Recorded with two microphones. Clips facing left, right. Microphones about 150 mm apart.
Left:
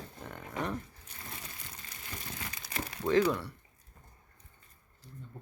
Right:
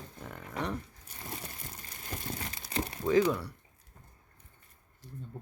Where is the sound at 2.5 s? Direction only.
30° right (ahead or behind).